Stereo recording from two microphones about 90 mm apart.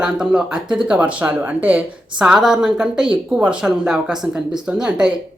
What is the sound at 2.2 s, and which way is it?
A woman's voice, 5° right (ahead or behind).